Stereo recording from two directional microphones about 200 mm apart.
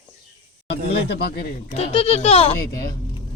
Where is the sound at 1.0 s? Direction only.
55° left (ahead or behind).